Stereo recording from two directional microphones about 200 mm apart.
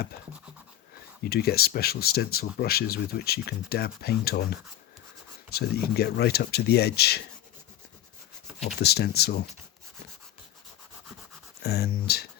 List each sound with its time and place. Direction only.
1.2 s speech: 50° left (ahead or behind)
5.5 s speech: 55° left (ahead or behind)
8.4 s a sound: centre (ahead or behind)
8.8 s speech: 55° left (ahead or behind)
11.6 s speech: 55° left (ahead or behind)